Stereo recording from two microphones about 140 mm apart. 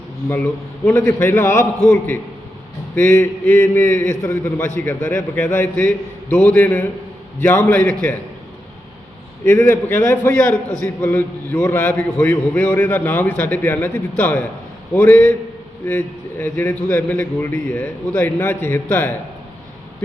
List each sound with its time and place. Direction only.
0.3 s a man's voice: 15° left (ahead or behind)
9.4 s a man's voice: 20° left (ahead or behind)
15.9 s a man's voice: 15° left (ahead or behind)